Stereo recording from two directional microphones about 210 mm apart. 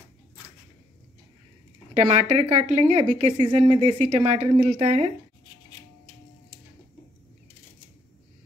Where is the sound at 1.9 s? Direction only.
30° right (ahead or behind).